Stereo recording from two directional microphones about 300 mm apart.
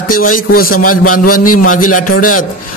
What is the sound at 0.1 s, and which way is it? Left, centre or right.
Speech, left.